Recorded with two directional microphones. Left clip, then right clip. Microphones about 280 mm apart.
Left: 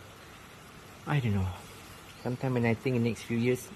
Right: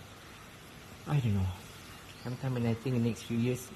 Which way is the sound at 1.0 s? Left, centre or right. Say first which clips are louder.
Left 4 dB; centre.